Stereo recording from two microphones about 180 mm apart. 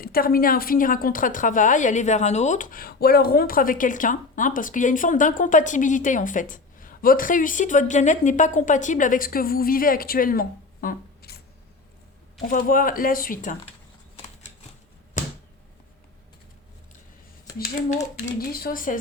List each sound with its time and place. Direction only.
0.0 s a woman's voice: 55° left (ahead or behind)
12.5 s a woman's voice: 50° left (ahead or behind)
18.3 s a woman's voice: 55° left (ahead or behind)